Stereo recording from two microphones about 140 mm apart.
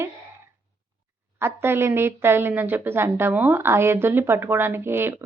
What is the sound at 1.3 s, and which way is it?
A woman's voice, 15° right (ahead or behind).